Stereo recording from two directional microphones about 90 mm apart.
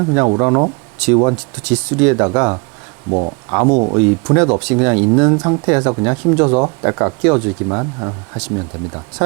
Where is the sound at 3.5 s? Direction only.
15° right (ahead or behind).